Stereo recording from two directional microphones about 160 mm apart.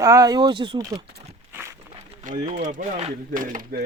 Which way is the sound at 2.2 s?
50° right (ahead or behind).